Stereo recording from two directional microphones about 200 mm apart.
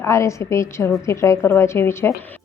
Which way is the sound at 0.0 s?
15° left (ahead or behind).